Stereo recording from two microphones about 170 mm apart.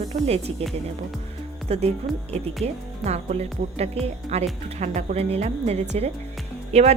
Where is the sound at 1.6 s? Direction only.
40° right (ahead or behind).